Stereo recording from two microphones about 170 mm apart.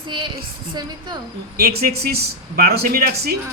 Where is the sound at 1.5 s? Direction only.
65° right (ahead or behind).